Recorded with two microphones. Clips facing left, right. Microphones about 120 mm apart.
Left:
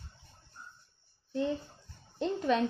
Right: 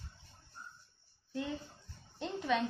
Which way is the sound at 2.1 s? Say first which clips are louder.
Left 5 dB; 35° left (ahead or behind).